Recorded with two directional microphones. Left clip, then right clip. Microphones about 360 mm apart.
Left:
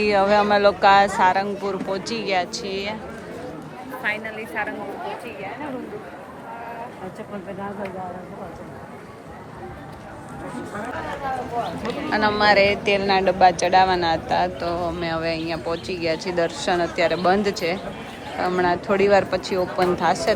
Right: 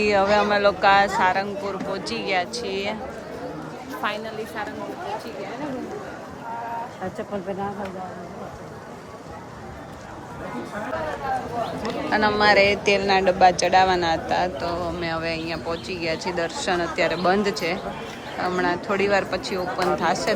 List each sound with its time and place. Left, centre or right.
0.0 s speech: centre
4.0 s a woman's voice: centre
11.8 s speech: centre